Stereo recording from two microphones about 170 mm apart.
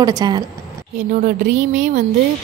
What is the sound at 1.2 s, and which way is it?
Speech, 45° right (ahead or behind).